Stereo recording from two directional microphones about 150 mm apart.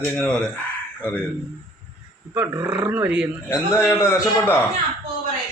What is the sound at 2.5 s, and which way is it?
Speech, 15° right (ahead or behind).